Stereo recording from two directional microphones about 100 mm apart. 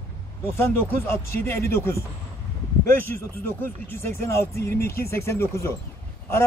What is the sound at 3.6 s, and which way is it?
Speech, 25° left (ahead or behind).